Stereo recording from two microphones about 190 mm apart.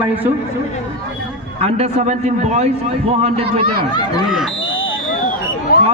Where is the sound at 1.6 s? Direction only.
35° right (ahead or behind).